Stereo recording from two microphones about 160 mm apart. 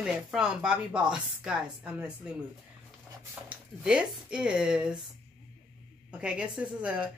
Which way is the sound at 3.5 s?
5° right (ahead or behind).